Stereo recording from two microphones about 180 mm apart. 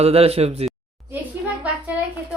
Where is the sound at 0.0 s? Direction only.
35° right (ahead or behind).